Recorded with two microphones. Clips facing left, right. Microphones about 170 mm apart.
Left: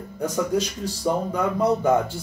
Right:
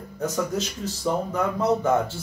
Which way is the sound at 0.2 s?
10° left (ahead or behind).